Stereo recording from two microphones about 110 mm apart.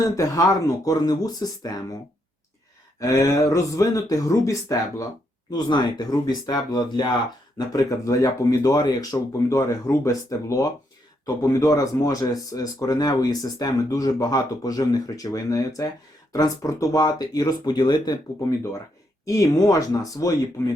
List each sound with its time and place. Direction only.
0.2 s speech: 30° left (ahead or behind)
3.0 s speech: 30° left (ahead or behind)